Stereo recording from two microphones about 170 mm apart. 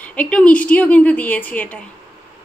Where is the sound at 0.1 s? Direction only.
5° left (ahead or behind).